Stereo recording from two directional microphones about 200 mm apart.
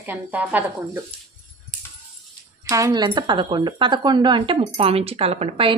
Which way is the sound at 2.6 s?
15° right (ahead or behind).